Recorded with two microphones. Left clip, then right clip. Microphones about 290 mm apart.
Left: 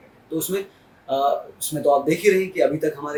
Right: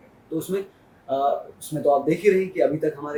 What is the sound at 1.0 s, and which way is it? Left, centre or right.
Speech, right.